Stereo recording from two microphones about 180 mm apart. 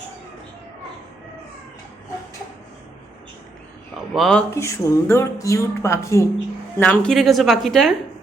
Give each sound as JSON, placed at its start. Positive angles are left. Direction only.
{"t": 4.1, "sound": "a woman's voice", "side_deg": 0}
{"t": 4.5, "sound": "a woman's voice", "side_deg": 15}